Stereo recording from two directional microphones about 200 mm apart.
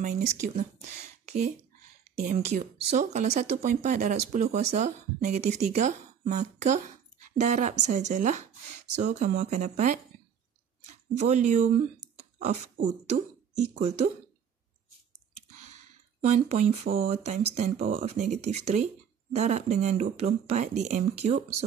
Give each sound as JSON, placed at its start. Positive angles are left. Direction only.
{"t": 0.0, "sound": "speech", "side_deg": -40}
{"t": 2.3, "sound": "speech", "side_deg": -35}
{"t": 11.1, "sound": "speech", "side_deg": -35}
{"t": 16.2, "sound": "speech", "side_deg": -35}